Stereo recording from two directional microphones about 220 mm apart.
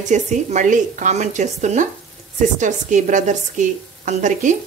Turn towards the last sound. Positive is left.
turn(degrees=-35)  # may be behind; listen again after turning